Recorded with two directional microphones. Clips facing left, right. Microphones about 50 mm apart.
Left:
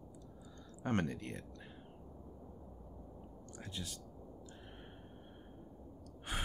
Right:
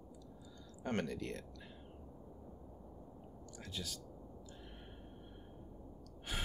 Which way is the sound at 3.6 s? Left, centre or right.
Centre.